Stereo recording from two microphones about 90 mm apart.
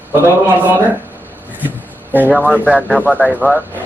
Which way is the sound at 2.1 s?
20° right (ahead or behind).